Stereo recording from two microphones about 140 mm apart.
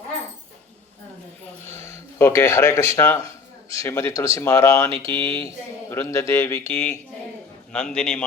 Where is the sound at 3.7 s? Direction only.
20° left (ahead or behind).